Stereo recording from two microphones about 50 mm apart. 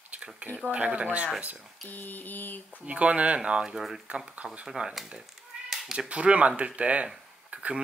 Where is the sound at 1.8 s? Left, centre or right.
Left.